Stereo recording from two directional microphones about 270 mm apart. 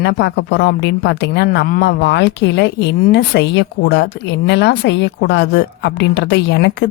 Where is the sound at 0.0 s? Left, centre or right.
Left.